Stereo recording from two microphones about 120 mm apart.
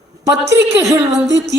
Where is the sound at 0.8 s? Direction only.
25° right (ahead or behind).